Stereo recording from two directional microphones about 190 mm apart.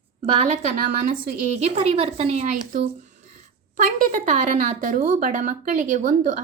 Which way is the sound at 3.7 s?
45° right (ahead or behind).